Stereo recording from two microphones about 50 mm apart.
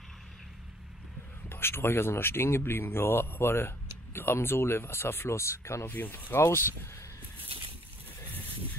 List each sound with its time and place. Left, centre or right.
1.5 s speech: left
5.9 s speech: left
6.3 s speech: left